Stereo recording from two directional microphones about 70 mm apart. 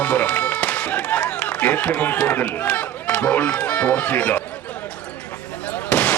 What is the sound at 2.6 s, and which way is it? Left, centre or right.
Speech, centre.